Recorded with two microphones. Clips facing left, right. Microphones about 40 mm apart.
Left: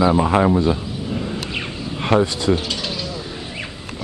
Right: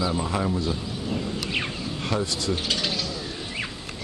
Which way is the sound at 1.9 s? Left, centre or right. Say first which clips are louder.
Left 11 dB; left.